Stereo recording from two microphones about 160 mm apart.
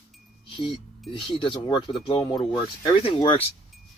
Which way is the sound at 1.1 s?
35° left (ahead or behind).